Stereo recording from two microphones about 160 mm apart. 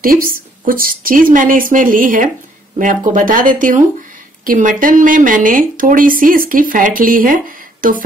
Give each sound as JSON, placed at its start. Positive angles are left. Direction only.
{"t": 0.0, "sound": "speech", "side_deg": -60}